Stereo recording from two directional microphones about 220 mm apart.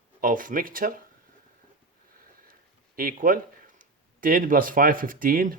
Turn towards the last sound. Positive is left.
turn(degrees=-40)  # may be behind; listen again after turning